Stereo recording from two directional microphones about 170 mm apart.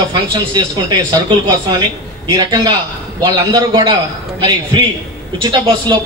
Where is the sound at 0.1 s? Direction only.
25° right (ahead or behind).